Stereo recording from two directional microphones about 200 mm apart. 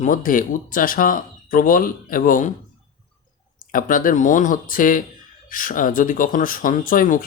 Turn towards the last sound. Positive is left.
turn(degrees=45)  # may be behind; listen again after turning